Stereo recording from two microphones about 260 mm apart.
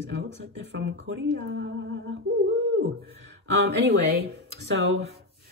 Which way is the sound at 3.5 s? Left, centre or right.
Right.